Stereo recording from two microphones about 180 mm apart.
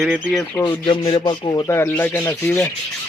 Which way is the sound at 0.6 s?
25° left (ahead or behind).